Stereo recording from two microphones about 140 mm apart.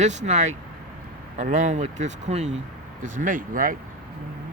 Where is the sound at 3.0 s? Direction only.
70° right (ahead or behind).